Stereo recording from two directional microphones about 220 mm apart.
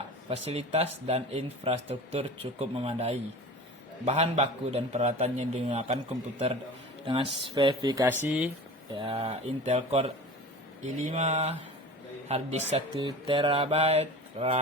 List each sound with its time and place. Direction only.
0.3 s speech: 25° right (ahead or behind)
7.0 s speech: 20° right (ahead or behind)
8.0 s speech: 5° right (ahead or behind)
9.0 s speech: 25° right (ahead or behind)